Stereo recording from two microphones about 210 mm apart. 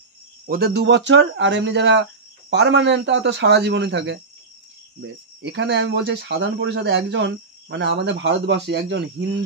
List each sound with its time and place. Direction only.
0.5 s speech: 45° right (ahead or behind)